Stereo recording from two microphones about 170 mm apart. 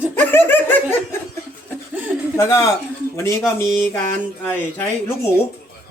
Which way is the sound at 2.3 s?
20° left (ahead or behind).